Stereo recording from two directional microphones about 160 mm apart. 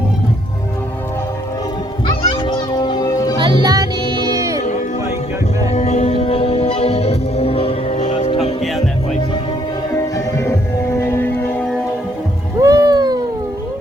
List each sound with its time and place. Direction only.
2.2 s music: 30° left (ahead or behind)
3.3 s music: 30° right (ahead or behind)
5.7 s music: 40° left (ahead or behind)
10.2 s music: 20° left (ahead or behind)
12.5 s a sound: 20° right (ahead or behind)